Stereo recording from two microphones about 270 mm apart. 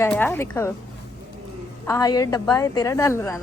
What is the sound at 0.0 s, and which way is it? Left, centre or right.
Speech, centre.